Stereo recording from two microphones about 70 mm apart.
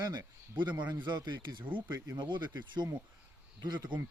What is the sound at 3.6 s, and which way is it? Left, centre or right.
Speech, right.